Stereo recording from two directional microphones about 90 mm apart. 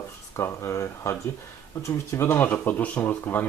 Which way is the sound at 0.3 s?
30° left (ahead or behind).